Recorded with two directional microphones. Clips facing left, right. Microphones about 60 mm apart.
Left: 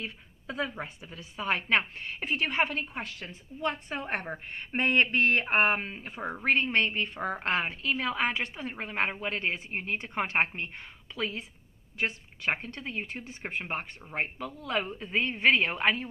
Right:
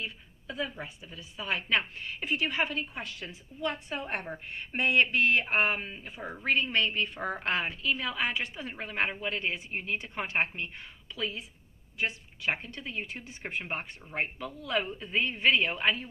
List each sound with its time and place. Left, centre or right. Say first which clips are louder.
0.0 s a woman's voice: even; left
9.3 s a woman's voice: left 1 dB; left